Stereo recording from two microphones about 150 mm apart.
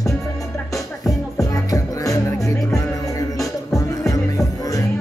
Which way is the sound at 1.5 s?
25° left (ahead or behind).